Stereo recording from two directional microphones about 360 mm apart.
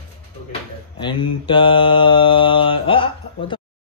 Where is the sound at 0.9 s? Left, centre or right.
Centre.